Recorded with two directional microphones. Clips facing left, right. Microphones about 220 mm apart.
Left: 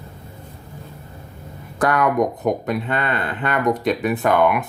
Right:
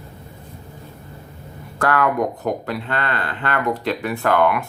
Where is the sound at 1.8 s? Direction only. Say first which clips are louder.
Left 1 dB; 20° left (ahead or behind).